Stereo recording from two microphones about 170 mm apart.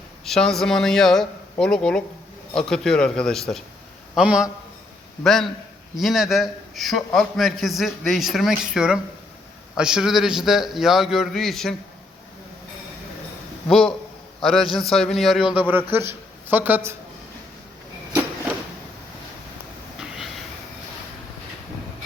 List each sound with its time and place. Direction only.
0.3 s a man's voice: 5° left (ahead or behind)
13.7 s a man's voice: 5° left (ahead or behind)
20.0 s a sound: 5° right (ahead or behind)